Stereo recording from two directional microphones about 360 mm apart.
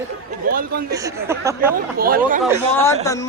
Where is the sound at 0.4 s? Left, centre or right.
Right.